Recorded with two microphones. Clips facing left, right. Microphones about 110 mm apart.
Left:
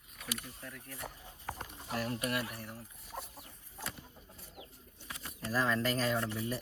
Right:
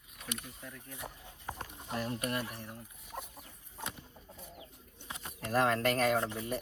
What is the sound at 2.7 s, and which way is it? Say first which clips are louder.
Speech: right 1 dB; centre (ahead or behind).